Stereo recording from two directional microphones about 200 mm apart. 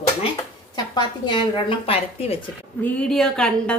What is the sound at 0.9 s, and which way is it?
Speech, 25° left (ahead or behind).